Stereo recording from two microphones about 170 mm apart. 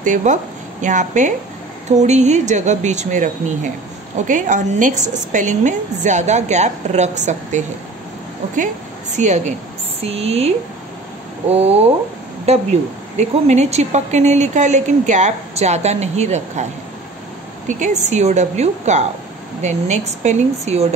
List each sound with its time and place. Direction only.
0.0 s a woman's voice: 45° right (ahead or behind)
9.1 s a woman's voice: 45° right (ahead or behind)
17.6 s a woman's voice: 45° right (ahead or behind)